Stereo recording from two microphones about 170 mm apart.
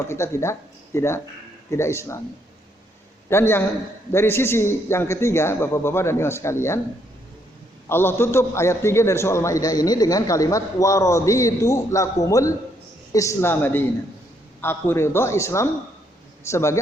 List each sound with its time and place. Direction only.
0.1 s a man's voice: 15° left (ahead or behind)
3.2 s a man's voice: 15° left (ahead or behind)
7.9 s a man's voice: 15° left (ahead or behind)